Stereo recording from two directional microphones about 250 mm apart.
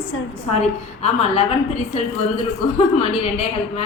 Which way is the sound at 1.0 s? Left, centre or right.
Left.